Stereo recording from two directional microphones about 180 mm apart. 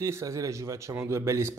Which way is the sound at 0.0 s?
15° right (ahead or behind).